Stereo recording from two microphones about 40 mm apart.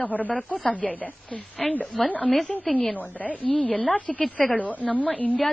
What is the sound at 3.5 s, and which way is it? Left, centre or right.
Speech, left.